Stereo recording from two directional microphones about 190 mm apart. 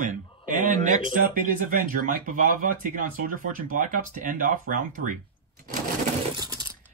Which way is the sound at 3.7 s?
45° right (ahead or behind).